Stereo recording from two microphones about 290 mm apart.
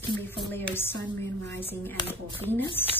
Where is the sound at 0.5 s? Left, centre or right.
Centre.